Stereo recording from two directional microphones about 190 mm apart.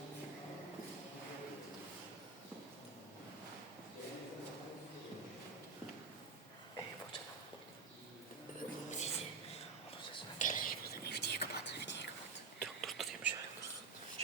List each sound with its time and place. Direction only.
8.9 s a sound: 35° left (ahead or behind)
10.3 s whispering: 45° left (ahead or behind); by 12.0 s 65° left (ahead or behind)
12.5 s whispering: centre (ahead or behind)